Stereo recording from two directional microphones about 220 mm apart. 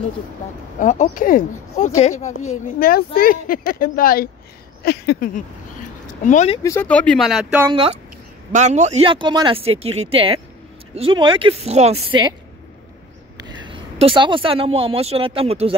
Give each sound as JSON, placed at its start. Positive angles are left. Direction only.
{"t": 0.7, "sound": "speech", "side_deg": 35}
{"t": 4.8, "sound": "a sound", "side_deg": 45}
{"t": 6.0, "sound": "speech", "side_deg": 35}
{"t": 6.6, "sound": "speech", "side_deg": 10}
{"t": 8.5, "sound": "speech", "side_deg": -35}
{"t": 13.7, "sound": "speech", "side_deg": -25}